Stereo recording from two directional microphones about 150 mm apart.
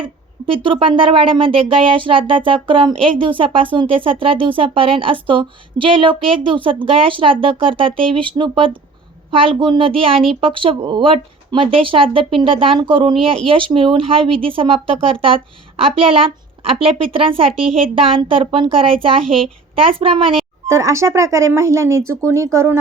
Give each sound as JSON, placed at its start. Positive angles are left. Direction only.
{"t": 0.4, "sound": "speech", "side_deg": -35}
{"t": 20.7, "sound": "speech", "side_deg": -20}